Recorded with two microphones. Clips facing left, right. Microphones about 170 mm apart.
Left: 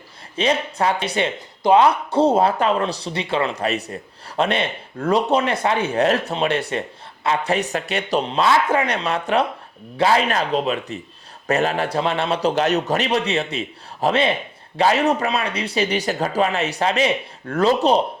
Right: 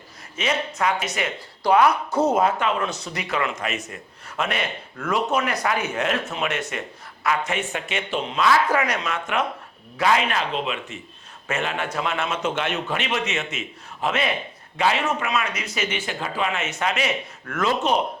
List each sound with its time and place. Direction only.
0.3 s speech: 35° left (ahead or behind)